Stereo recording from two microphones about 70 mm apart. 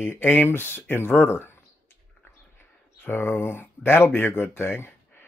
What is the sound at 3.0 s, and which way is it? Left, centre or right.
Speech, left.